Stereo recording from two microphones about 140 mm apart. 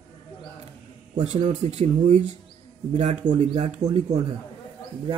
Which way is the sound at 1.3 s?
55° right (ahead or behind).